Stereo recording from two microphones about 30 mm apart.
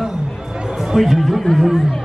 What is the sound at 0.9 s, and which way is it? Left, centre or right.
Chatter, centre.